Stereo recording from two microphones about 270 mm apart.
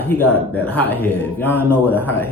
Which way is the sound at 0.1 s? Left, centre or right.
Centre.